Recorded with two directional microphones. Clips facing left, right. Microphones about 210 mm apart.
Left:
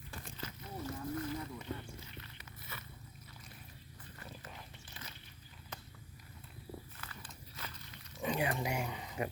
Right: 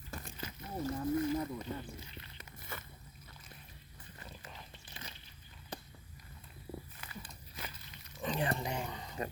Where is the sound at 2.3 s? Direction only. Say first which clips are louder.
Right 3 dB; 50° right (ahead or behind).